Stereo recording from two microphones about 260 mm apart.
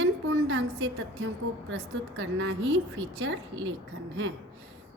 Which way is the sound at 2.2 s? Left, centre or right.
Right.